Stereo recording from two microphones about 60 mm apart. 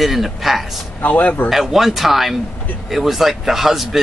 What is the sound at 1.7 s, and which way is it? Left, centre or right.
Speech, centre.